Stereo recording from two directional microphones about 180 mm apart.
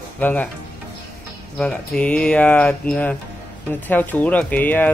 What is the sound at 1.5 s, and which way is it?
Speech, 5° left (ahead or behind).